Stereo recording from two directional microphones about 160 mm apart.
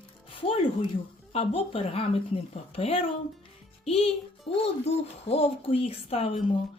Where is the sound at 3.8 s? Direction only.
40° left (ahead or behind).